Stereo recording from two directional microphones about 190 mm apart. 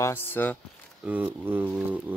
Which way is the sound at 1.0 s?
10° right (ahead or behind).